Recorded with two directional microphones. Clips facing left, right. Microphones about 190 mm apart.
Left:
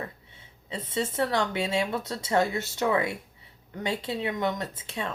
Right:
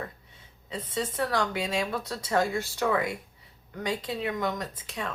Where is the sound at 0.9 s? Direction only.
25° left (ahead or behind).